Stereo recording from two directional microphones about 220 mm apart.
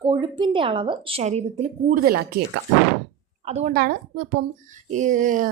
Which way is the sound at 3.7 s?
45° right (ahead or behind).